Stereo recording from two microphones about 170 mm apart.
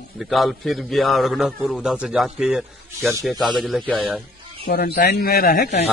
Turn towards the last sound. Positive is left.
turn(degrees=50)  # may be behind; listen again after turning